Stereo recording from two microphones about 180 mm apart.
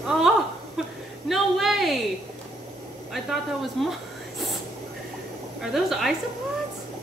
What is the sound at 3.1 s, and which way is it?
Speech, centre (ahead or behind).